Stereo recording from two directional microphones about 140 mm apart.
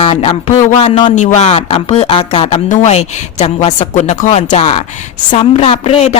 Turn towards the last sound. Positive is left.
turn(degrees=50)  # may be behind; listen again after turning